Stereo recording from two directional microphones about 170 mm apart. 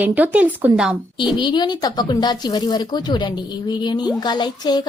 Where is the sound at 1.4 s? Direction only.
25° left (ahead or behind).